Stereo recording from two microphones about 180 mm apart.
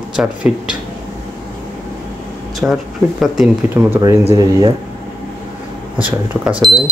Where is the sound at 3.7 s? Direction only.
15° right (ahead or behind).